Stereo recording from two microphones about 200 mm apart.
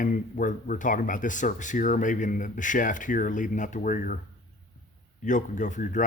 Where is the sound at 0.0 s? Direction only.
40° left (ahead or behind).